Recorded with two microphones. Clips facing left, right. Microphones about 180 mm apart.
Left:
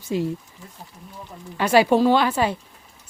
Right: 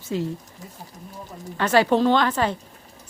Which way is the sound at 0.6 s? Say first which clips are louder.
Right 2 dB; 40° right (ahead or behind).